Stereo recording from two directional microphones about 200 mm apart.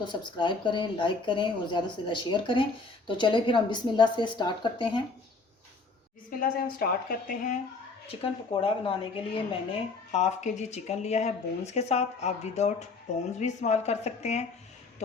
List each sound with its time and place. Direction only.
0.0 s speech: 25° left (ahead or behind)
6.4 s a woman's voice: 45° left (ahead or behind)
8.0 s speech: 25° left (ahead or behind)